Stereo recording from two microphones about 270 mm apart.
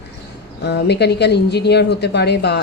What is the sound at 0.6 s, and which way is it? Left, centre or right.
Speech, left.